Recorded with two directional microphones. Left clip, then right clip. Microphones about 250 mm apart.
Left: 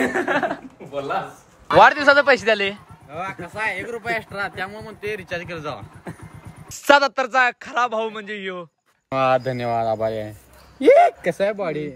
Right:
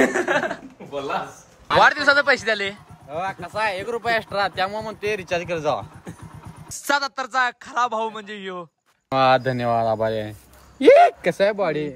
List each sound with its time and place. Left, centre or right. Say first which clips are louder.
0.1 s speech: even; centre
1.8 s a man's voice: left 3 dB; centre
3.1 s speech: right 2 dB; centre; by 5.9 s right
6.7 s a man's voice: left 7 dB; centre
9.1 s speech: right 2 dB; right